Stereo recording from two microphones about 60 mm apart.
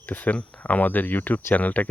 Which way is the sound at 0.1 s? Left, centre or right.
Left.